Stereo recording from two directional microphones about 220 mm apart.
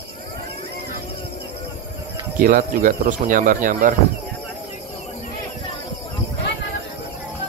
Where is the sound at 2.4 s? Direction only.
40° right (ahead or behind).